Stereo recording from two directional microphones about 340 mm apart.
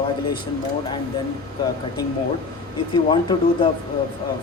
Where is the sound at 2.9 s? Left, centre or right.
Centre.